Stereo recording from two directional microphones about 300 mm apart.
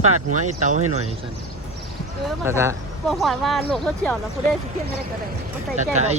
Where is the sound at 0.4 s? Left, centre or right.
Right.